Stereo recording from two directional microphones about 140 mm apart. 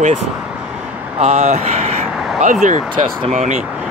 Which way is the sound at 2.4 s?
60° right (ahead or behind).